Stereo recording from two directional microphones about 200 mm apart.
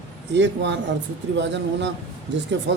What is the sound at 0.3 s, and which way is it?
Speech, 60° right (ahead or behind).